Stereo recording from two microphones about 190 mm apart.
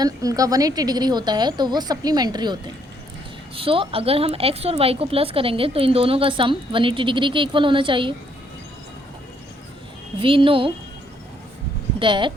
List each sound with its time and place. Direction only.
0.0 s a woman's voice: 20° right (ahead or behind)
10.2 s a woman's voice: 25° right (ahead or behind)
11.9 s a woman's voice: 25° right (ahead or behind)